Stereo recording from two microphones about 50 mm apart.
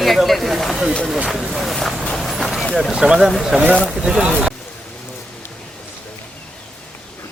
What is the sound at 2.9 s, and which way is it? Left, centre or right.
Speech, centre.